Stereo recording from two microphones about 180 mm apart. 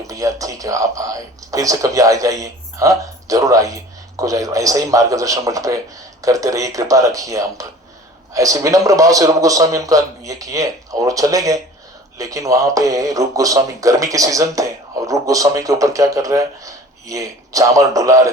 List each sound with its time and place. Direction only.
0.1 s speech: 20° right (ahead or behind)